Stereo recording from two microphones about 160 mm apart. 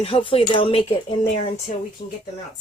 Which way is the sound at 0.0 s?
35° left (ahead or behind).